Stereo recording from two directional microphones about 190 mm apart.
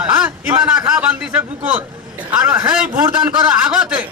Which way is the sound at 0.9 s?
5° right (ahead or behind).